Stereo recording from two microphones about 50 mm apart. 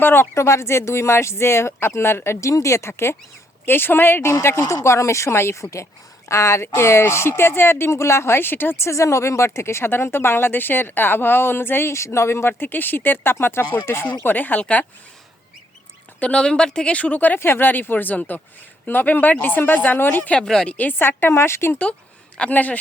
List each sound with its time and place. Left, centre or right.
0.0 s speech: left
0.3 s speech: left
3.7 s speech: left
4.2 s speech: left
14.1 s speech: left
16.2 s speech: centre
17.4 s speech: left
20.7 s speech: left
21.0 s speech: left
21.3 s speech: left
22.4 s speech: left